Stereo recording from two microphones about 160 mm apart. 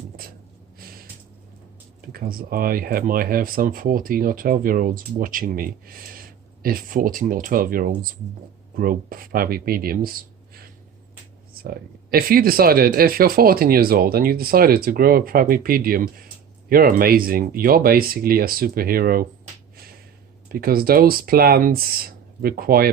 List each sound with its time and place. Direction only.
2.1 s speech: 65° right (ahead or behind)
12.1 s speech: 65° right (ahead or behind)
20.5 s speech: 70° right (ahead or behind)